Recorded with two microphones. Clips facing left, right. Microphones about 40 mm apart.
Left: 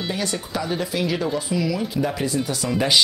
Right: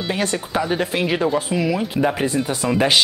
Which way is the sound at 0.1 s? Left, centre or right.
Right.